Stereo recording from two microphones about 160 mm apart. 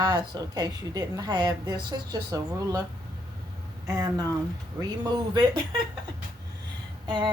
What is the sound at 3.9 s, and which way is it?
Speech, 20° right (ahead or behind).